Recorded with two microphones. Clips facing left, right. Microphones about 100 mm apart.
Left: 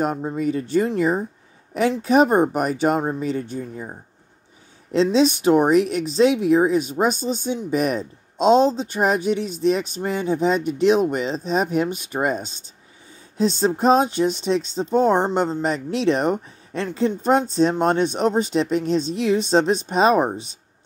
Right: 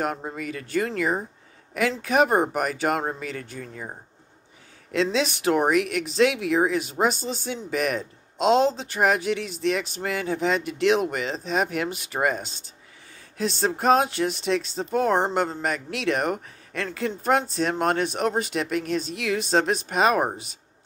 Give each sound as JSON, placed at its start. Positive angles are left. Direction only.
{"t": 0.4, "sound": "speech", "side_deg": 30}
{"t": 4.9, "sound": "speech", "side_deg": 20}